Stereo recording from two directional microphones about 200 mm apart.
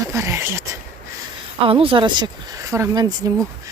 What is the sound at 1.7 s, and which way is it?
Speech, 25° right (ahead or behind).